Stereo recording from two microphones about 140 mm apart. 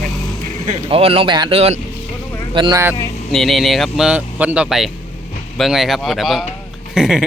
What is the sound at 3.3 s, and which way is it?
Speech, centre (ahead or behind).